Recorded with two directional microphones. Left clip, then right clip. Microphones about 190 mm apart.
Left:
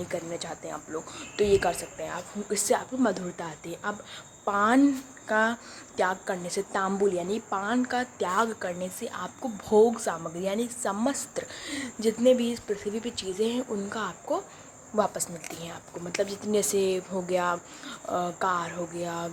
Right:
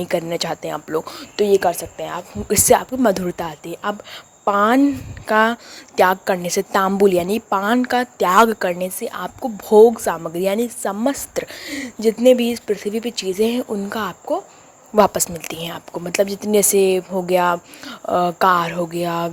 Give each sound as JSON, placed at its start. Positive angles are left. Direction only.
{"t": 0.0, "sound": "a woman's voice", "side_deg": -50}